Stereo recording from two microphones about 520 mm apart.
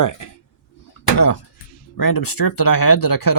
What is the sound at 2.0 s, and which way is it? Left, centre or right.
Speech, left.